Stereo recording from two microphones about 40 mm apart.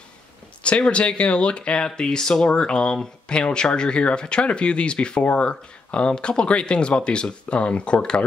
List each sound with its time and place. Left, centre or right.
0.7 s speech: left